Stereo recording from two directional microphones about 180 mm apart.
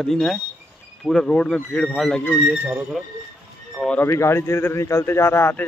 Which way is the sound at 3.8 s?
10° left (ahead or behind).